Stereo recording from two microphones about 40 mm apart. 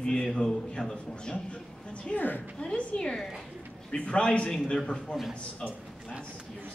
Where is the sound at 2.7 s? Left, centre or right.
Left.